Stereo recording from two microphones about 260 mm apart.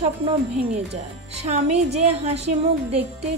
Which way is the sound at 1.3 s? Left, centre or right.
Right.